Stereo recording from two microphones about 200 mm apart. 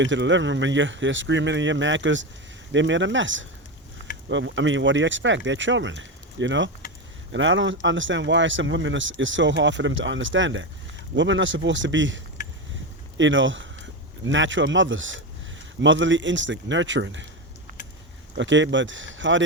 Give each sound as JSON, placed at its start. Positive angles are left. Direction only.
{"t": 0.0, "sound": "speech", "side_deg": -65}
{"t": 18.3, "sound": "speech", "side_deg": -65}